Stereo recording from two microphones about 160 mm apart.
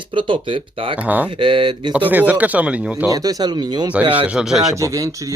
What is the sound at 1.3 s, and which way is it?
Speech, 30° right (ahead or behind).